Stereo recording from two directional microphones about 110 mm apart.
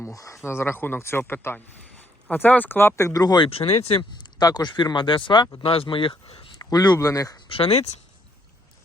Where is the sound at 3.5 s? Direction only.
65° left (ahead or behind).